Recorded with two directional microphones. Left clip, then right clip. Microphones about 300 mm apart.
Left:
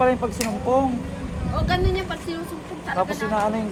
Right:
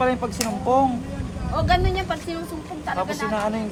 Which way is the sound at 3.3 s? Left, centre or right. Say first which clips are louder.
Left 2 dB; centre.